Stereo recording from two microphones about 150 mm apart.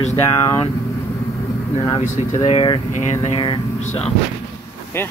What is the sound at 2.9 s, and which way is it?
Speech, 50° left (ahead or behind).